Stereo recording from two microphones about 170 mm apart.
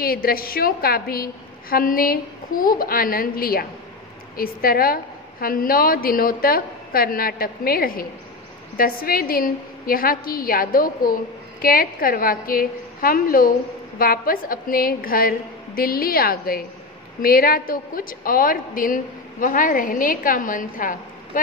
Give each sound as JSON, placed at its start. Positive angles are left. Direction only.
{"t": 0.0, "sound": "a woman's voice", "side_deg": 60}